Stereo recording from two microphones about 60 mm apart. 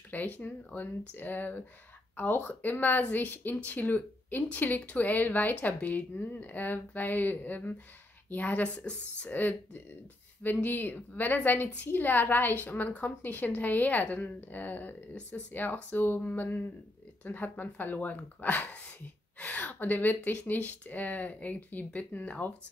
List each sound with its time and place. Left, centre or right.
0.1 s a woman's voice: left
9.3 s a woman's voice: left